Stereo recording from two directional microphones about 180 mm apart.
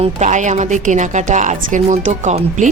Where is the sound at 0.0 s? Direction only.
40° right (ahead or behind).